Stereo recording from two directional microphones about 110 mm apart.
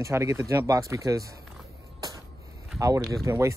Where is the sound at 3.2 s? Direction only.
30° right (ahead or behind).